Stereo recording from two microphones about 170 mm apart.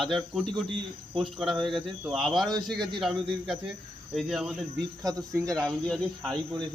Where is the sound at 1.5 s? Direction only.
Centre (ahead or behind).